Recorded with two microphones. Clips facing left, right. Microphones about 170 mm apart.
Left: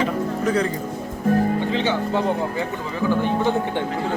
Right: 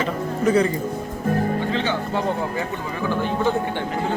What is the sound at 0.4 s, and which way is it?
Speech, 5° right (ahead or behind).